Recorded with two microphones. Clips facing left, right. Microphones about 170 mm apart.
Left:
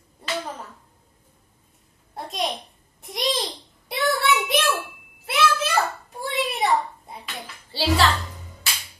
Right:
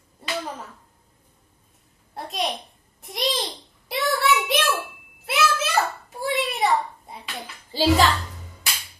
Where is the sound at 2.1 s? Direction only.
Centre (ahead or behind).